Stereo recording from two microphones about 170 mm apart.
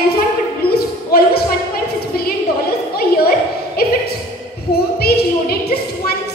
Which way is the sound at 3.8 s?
65° left (ahead or behind).